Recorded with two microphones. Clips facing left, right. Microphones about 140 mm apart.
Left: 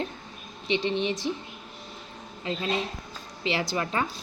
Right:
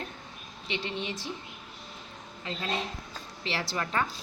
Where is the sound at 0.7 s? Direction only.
20° left (ahead or behind).